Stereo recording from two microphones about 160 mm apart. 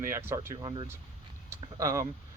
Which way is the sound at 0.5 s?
30° right (ahead or behind).